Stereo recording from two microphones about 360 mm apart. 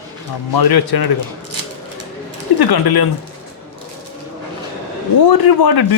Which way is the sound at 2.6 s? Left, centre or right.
Left.